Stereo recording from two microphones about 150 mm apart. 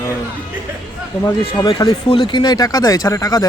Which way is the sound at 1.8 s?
25° left (ahead or behind).